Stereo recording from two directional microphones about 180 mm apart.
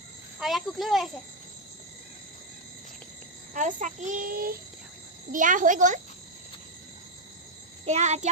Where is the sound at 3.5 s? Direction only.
45° right (ahead or behind).